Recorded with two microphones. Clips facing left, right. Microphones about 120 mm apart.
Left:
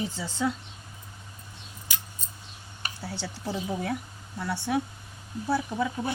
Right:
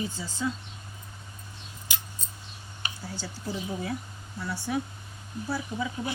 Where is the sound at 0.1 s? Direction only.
75° left (ahead or behind).